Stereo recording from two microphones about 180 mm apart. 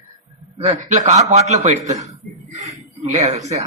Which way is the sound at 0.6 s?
40° right (ahead or behind).